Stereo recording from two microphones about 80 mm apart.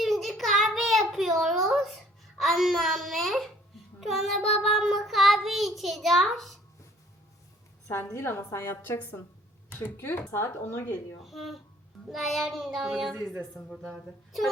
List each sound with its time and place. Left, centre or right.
0.0 s a sound: centre
4.0 s child singing: centre
8.1 s a woman's voice: left
11.2 s child singing: centre